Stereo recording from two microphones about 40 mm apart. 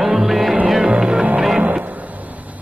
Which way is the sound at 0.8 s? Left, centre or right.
Right.